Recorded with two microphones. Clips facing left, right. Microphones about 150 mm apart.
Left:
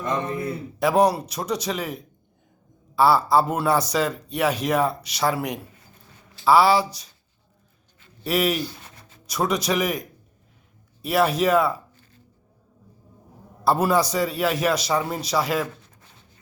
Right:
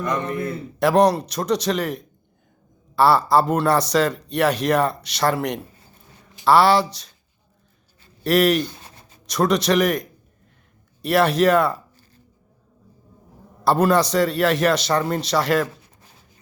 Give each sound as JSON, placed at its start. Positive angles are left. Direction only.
{"t": 0.0, "sound": "a man's voice", "side_deg": 25}
{"t": 0.3, "sound": "speech", "side_deg": 5}
{"t": 2.9, "sound": "speech", "side_deg": 5}
{"t": 8.2, "sound": "speech", "side_deg": 5}
{"t": 8.8, "sound": "a sound", "side_deg": -35}
{"t": 9.2, "sound": "speech", "side_deg": 5}
{"t": 11.3, "sound": "speech", "side_deg": 5}
{"t": 13.7, "sound": "speech", "side_deg": 5}